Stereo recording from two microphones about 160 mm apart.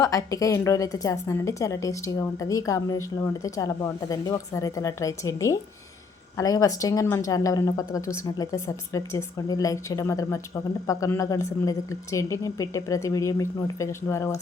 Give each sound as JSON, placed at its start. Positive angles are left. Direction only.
{"t": 0.0, "sound": "a woman's voice", "side_deg": 20}